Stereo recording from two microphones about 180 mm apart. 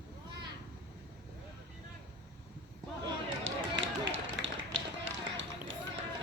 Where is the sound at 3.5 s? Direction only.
90° right.